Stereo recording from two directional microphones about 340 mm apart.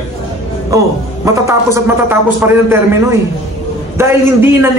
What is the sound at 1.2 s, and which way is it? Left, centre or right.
A man's voice, centre.